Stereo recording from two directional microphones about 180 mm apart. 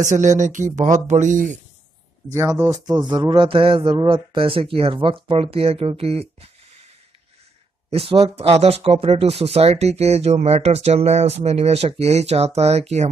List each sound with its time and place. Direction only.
0.0 s speech: 45° right (ahead or behind)
2.2 s a man's voice: 15° right (ahead or behind); by 6.5 s 35° right (ahead or behind)
7.9 s speech: 30° right (ahead or behind)